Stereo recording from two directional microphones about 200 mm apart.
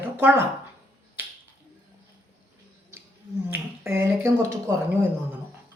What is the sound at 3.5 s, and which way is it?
Finger snapping, 15° right (ahead or behind).